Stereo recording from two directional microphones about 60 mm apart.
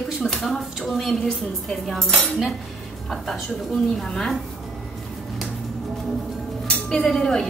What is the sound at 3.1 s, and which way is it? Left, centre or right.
A woman's voice, centre.